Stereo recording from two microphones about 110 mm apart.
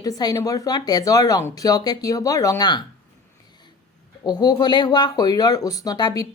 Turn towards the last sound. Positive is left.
turn(degrees=35)  # may be behind; listen again after turning